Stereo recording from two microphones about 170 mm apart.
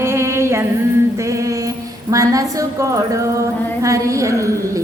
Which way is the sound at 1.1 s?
20° right (ahead or behind).